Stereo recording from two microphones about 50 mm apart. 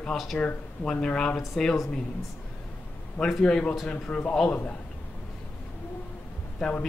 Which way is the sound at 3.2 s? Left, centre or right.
Centre.